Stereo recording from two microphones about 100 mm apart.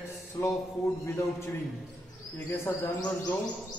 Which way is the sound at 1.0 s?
30° left (ahead or behind).